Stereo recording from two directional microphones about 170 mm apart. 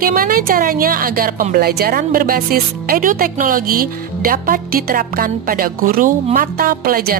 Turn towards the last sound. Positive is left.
turn(degrees=-60)  # may be behind; listen again after turning